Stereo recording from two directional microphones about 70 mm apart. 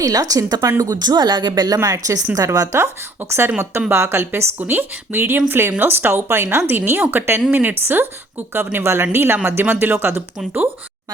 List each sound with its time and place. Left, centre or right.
0.0 s a woman's voice: right
0.6 s speech: right
1.8 s a woman's voice: right
2.7 s speech: right